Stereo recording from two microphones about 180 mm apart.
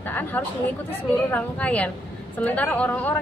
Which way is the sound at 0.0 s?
10° left (ahead or behind).